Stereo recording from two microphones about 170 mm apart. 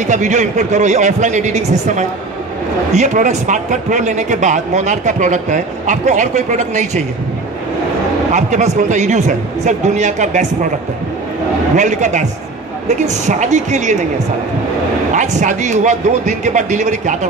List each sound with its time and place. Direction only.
0.0 s a man's voice: 45° right (ahead or behind)
8.3 s a man's voice: 45° right (ahead or behind)
11.7 s a man's voice: 45° right (ahead or behind)
15.1 s a man's voice: 45° right (ahead or behind)